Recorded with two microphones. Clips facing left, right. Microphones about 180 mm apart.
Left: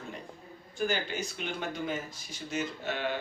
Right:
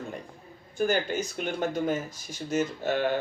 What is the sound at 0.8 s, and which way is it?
Speech, 45° right (ahead or behind).